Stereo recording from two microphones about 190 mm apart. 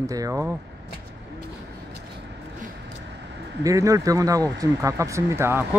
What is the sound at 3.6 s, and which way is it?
A man's voice, 15° right (ahead or behind).